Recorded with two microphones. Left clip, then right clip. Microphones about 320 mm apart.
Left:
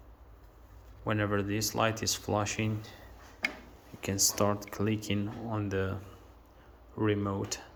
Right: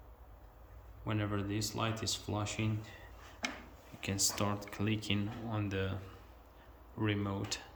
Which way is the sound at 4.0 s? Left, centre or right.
Centre.